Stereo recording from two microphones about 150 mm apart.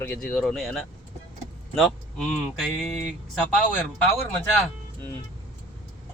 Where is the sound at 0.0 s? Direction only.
5° left (ahead or behind).